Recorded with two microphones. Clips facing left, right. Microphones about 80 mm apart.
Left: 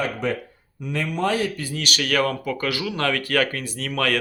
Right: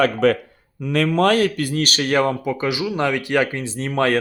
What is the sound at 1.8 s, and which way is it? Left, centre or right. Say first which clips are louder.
Speech: right 3 dB; right.